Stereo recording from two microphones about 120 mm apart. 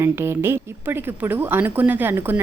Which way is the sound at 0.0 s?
20° right (ahead or behind).